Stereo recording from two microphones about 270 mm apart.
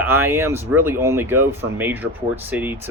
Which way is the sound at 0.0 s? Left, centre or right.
Centre.